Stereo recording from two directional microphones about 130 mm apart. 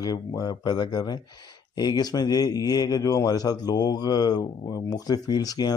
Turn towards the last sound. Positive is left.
turn(degrees=30)  # may be behind; listen again after turning